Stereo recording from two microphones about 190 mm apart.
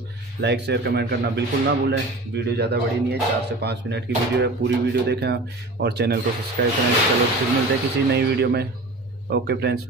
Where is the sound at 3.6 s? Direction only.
60° right (ahead or behind).